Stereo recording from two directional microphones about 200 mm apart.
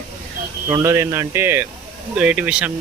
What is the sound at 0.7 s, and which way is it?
Speech, 15° right (ahead or behind).